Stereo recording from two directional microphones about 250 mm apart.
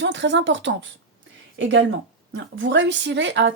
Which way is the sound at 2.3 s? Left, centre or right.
Right.